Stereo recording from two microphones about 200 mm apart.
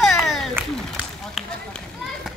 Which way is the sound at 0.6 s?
5° right (ahead or behind).